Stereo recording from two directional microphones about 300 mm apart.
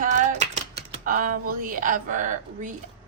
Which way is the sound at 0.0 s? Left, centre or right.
Right.